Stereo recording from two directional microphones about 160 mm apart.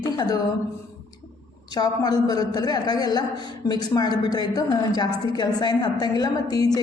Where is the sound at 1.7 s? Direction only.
25° left (ahead or behind).